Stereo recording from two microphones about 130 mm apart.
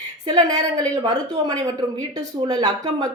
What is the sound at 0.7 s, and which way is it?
Speech, 35° right (ahead or behind).